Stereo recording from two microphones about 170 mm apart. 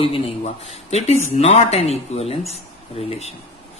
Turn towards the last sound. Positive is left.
turn(degrees=40)  # may be behind; listen again after turning